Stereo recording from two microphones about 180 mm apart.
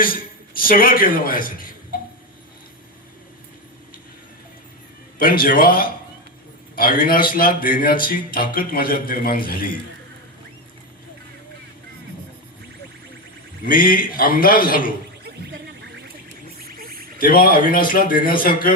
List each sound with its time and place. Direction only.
0.5 s a man's voice: 50° left (ahead or behind)
5.2 s a man's voice: 50° left (ahead or behind)
13.7 s a man's voice: 50° left (ahead or behind)
16.6 s a sound: 55° right (ahead or behind)
17.2 s a man's voice: 50° left (ahead or behind)